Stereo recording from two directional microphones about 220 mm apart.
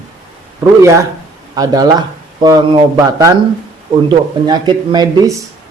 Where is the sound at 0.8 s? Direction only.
15° right (ahead or behind).